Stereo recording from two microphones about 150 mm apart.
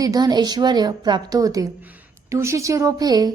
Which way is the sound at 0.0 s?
25° right (ahead or behind).